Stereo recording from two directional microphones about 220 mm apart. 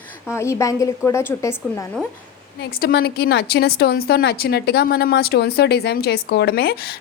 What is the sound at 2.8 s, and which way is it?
A woman's voice, 45° left (ahead or behind).